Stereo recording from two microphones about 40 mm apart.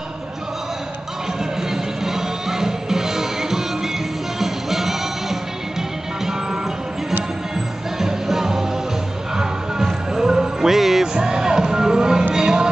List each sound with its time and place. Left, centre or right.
1.6 s music: centre
7.5 s music: centre